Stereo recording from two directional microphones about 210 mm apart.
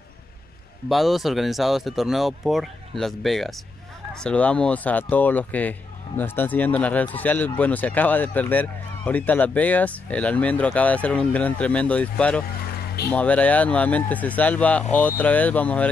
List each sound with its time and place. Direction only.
0.8 s speech: centre (ahead or behind)
12.6 s a sound: 45° left (ahead or behind)
13.1 s speech: 5° left (ahead or behind)